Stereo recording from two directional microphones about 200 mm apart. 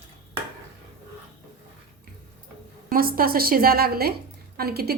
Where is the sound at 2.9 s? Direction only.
45° right (ahead or behind).